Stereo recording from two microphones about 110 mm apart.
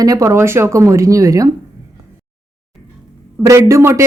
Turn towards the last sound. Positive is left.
turn(degrees=-25)  # may be behind; listen again after turning